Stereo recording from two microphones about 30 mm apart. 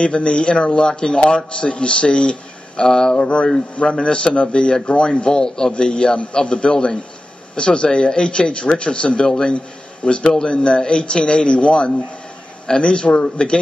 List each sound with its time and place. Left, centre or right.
0.0 s speech: left
2.9 s mantra: left
3.7 s speech: left